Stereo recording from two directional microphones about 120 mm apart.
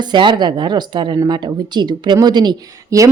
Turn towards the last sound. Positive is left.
turn(degrees=-30)  # may be behind; listen again after turning